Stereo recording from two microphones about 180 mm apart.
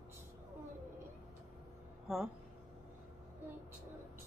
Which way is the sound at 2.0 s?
Centre (ahead or behind).